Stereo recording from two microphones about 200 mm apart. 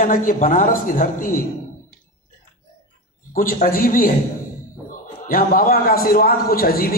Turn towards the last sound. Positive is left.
turn(degrees=45)  # may be behind; listen again after turning